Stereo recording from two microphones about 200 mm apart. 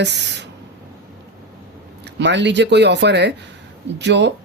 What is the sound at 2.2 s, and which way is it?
Speech, 60° right (ahead or behind).